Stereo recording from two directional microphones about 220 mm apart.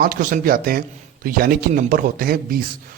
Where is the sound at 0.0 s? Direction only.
40° right (ahead or behind).